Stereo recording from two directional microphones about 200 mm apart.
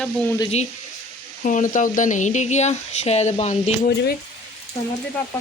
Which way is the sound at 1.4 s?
40° left (ahead or behind).